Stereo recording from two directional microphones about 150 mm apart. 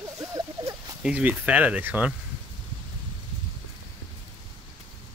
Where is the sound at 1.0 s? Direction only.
10° right (ahead or behind).